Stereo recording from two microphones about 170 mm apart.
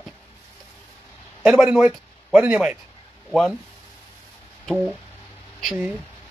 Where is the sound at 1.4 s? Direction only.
5° right (ahead or behind).